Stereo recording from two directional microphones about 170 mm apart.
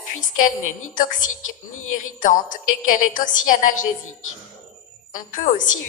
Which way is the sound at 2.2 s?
50° left (ahead or behind).